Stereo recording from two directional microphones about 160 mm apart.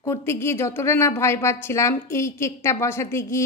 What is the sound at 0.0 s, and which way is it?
A woman's voice, 15° left (ahead or behind).